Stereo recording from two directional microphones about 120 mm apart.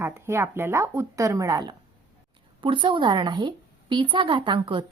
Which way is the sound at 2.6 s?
45° right (ahead or behind).